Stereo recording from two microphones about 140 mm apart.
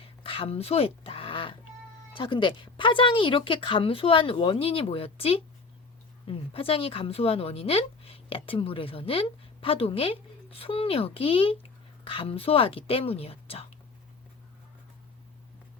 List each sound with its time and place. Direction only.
0.0 s fowl: 40° left (ahead or behind)
2.1 s speech: 35° left (ahead or behind)